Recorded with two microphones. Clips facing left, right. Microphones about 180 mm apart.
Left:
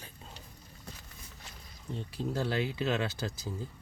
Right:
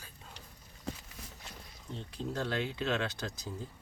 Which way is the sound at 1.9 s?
5° left (ahead or behind).